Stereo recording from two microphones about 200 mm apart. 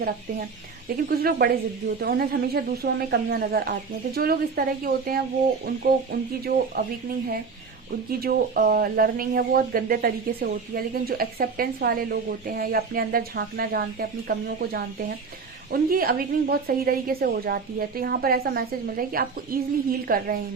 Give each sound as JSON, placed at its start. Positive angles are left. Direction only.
{"t": 0.9, "sound": "speech", "side_deg": -50}
{"t": 8.2, "sound": "speech", "side_deg": -50}